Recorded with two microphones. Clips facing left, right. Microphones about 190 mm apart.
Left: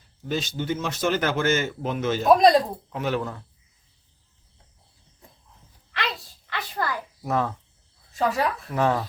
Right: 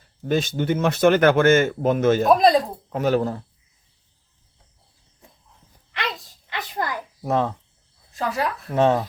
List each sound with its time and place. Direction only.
0.2 s speech: 55° right (ahead or behind)
2.2 s a woman's voice: centre (ahead or behind)
2.9 s speech: 40° right (ahead or behind)
5.9 s a sound: 20° right (ahead or behind)
7.2 s speech: 25° right (ahead or behind)
8.1 s a woman's voice: centre (ahead or behind)
8.7 s speech: 25° right (ahead or behind)